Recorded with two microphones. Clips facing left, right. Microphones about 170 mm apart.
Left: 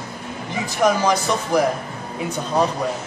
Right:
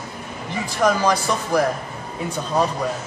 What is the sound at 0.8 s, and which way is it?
Speech, 15° left (ahead or behind).